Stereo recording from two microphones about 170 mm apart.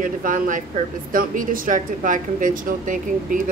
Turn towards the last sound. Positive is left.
turn(degrees=-50)  # may be behind; listen again after turning